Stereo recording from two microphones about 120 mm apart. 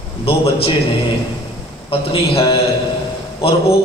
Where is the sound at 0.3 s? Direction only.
50° left (ahead or behind).